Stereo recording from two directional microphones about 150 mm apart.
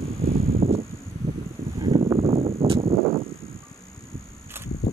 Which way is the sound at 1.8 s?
35° right (ahead or behind).